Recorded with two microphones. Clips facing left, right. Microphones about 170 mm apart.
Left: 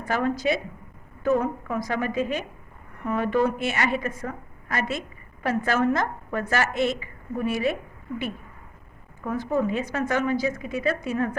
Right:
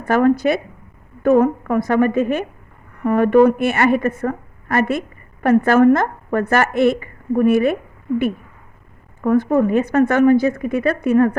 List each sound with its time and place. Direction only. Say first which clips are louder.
0.0 s a woman's voice: right 10 dB; 55° right (ahead or behind)
9.2 s a woman's voice: right 10 dB; 60° right (ahead or behind)